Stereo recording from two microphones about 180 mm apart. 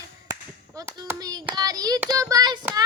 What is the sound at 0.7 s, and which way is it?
Clapping, 15° right (ahead or behind).